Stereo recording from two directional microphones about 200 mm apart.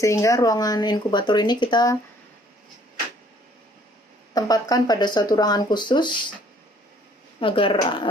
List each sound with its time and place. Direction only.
0.0 s speech: 15° left (ahead or behind)
4.4 s speech: 20° left (ahead or behind)
7.3 s speech: 25° left (ahead or behind)